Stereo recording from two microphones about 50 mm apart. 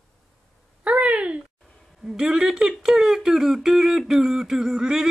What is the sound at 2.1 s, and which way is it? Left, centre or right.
Speech, centre.